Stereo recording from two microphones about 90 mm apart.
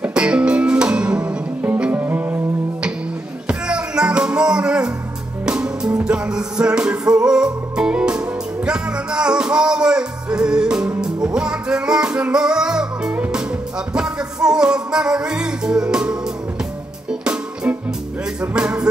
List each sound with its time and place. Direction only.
0.0 s music: 10° right (ahead or behind)